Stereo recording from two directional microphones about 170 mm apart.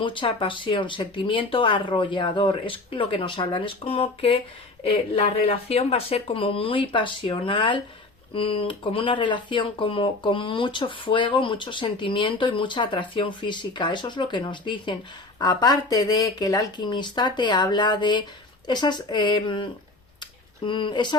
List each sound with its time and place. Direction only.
0.0 s speech: 30° left (ahead or behind)
20.7 s speech: 30° left (ahead or behind)